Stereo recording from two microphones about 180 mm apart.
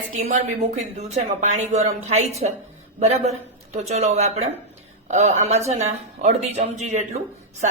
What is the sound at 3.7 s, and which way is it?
Speech, 35° right (ahead or behind).